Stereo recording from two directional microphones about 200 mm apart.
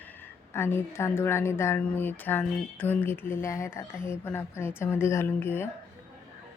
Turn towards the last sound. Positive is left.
turn(degrees=10)  # may be behind; listen again after turning